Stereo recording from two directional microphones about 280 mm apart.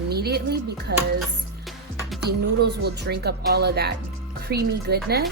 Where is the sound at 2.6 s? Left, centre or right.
Right.